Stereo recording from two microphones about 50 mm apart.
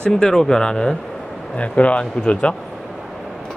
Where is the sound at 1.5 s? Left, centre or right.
Left.